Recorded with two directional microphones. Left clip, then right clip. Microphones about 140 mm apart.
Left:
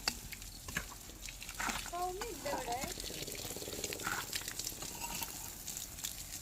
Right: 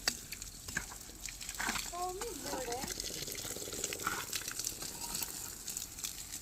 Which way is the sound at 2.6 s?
35° right (ahead or behind).